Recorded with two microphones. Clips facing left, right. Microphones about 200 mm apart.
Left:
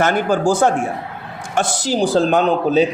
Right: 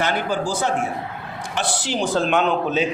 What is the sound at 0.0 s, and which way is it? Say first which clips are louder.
A man's voice: left 6 dB; 45° left (ahead or behind).